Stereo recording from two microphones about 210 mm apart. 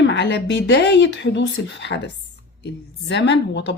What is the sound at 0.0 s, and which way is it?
A woman's voice, 55° left (ahead or behind).